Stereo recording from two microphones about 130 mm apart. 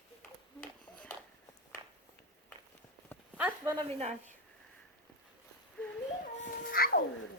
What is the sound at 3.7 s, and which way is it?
Speech, 40° right (ahead or behind).